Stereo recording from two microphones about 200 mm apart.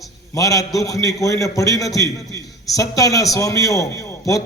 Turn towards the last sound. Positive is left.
turn(degrees=15)  # may be behind; listen again after turning